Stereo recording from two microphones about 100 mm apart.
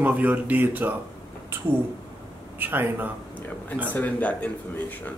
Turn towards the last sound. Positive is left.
turn(degrees=15)  # may be behind; listen again after turning